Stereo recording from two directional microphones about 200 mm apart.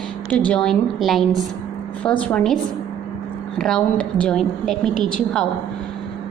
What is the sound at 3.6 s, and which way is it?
A woman's voice, 5° left (ahead or behind).